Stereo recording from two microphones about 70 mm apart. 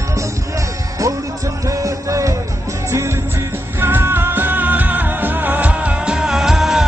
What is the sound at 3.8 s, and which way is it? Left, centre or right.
Music, right.